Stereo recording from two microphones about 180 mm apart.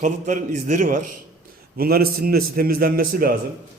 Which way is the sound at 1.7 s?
55° right (ahead or behind).